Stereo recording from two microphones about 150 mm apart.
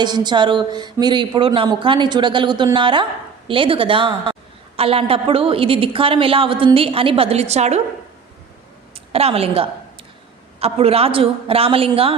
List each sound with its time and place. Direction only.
0.0 s speech: 30° right (ahead or behind); by 7.8 s 45° right (ahead or behind)
9.1 s speech: 40° right (ahead or behind)